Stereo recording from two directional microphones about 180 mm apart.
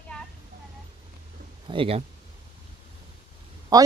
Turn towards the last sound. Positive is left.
turn(degrees=-20)  # may be behind; listen again after turning